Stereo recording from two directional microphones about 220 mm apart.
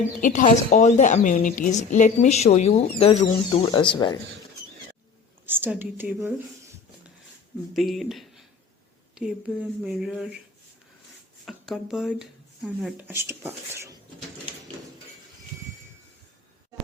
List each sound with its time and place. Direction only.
0.2 s a woman's voice: 35° left (ahead or behind)
5.5 s speech: 10° right (ahead or behind)
7.7 s speech: centre (ahead or behind)
11.4 s speech: centre (ahead or behind)